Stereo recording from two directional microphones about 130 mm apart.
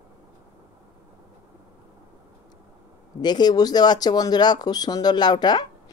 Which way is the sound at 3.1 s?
35° left (ahead or behind).